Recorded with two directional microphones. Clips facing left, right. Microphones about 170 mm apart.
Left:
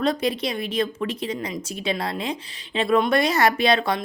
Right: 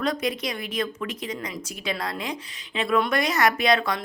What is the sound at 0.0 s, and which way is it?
Speech, 30° left (ahead or behind).